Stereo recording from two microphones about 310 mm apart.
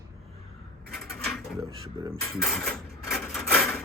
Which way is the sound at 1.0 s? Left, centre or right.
Centre.